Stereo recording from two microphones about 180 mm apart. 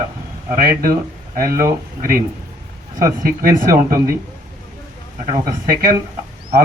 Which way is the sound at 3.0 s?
50° right (ahead or behind).